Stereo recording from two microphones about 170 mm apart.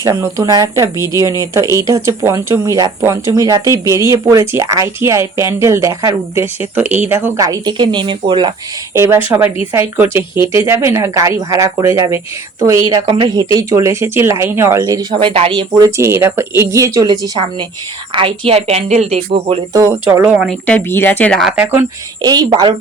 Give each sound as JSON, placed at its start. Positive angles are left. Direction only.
{"t": 0.0, "sound": "speech", "side_deg": -20}
{"t": 8.9, "sound": "speech", "side_deg": -15}
{"t": 15.7, "sound": "speech", "side_deg": -15}
{"t": 19.7, "sound": "speech", "side_deg": -20}
{"t": 20.7, "sound": "speech", "side_deg": 10}
{"t": 22.2, "sound": "speech", "side_deg": -25}